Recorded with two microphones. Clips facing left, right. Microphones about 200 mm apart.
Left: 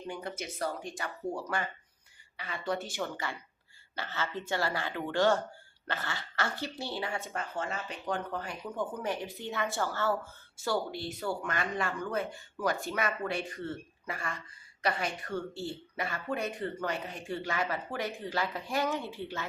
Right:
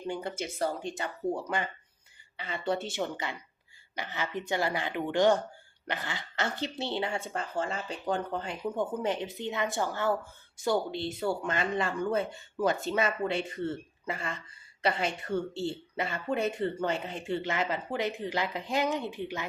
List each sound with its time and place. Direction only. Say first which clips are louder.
0.1 s speech: right 4 dB; 30° right (ahead or behind)